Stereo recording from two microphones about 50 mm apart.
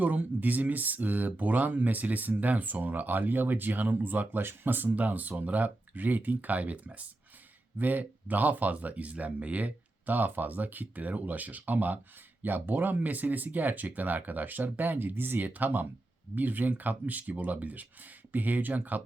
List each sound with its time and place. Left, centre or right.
0.0 s speech: right